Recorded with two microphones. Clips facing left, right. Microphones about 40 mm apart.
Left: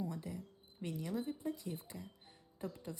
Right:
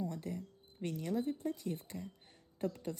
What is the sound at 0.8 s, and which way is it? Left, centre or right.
Speech, right.